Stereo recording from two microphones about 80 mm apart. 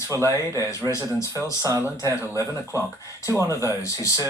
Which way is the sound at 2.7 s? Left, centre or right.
Left.